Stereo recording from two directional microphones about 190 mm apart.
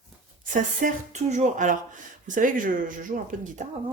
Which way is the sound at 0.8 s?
40° right (ahead or behind).